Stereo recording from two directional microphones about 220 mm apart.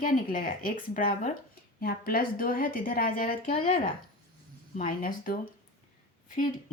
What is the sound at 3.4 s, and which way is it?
Speech, 25° left (ahead or behind).